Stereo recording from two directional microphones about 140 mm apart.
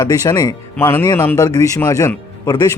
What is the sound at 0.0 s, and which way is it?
Speech, 25° left (ahead or behind).